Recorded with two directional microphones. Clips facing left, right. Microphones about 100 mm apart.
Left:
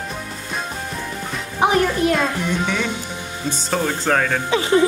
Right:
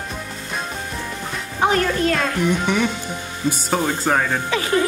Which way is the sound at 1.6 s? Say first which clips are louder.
Left 1 dB; 15° left (ahead or behind).